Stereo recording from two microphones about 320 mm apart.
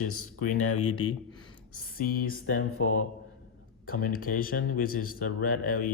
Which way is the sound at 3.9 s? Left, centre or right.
Left.